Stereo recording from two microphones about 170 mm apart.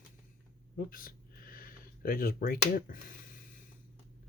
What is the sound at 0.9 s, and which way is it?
Speech, 55° left (ahead or behind).